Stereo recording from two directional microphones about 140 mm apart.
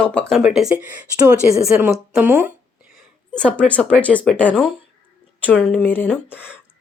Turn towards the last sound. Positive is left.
turn(degrees=10)  # may be behind; listen again after turning